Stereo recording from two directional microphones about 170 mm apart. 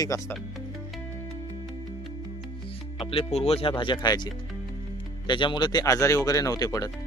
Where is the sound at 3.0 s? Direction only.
35° left (ahead or behind).